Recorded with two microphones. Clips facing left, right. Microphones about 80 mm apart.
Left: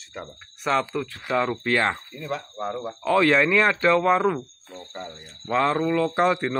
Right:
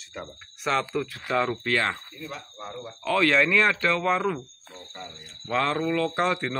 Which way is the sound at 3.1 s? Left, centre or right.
Centre.